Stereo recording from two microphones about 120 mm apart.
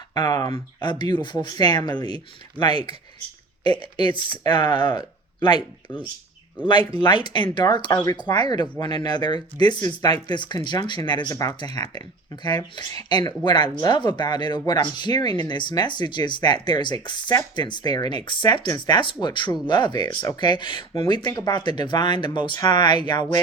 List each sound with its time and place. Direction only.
0.1 s speech: 35° left (ahead or behind)